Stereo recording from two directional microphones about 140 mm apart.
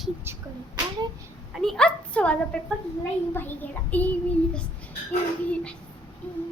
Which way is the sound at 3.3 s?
15° left (ahead or behind).